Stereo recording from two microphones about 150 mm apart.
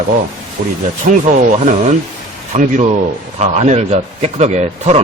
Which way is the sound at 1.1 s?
60° right (ahead or behind).